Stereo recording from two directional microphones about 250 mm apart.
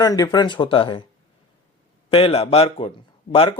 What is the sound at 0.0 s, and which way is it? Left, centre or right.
Speech, centre.